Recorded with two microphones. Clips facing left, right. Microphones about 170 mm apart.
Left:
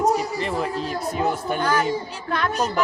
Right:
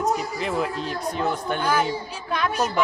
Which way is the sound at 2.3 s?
10° right (ahead or behind).